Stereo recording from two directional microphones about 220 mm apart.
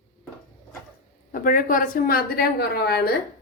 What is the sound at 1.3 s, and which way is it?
A woman's voice, 40° left (ahead or behind).